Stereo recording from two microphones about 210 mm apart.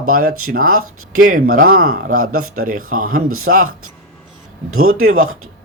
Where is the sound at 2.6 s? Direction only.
40° right (ahead or behind).